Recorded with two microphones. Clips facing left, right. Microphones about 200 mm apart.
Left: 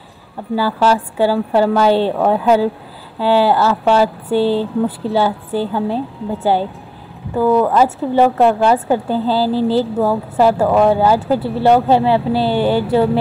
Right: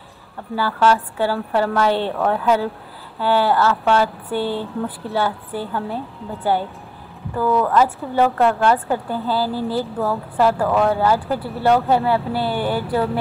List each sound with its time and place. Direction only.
0.6 s speech: 30° left (ahead or behind)